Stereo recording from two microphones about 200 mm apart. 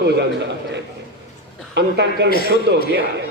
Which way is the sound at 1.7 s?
60° right (ahead or behind).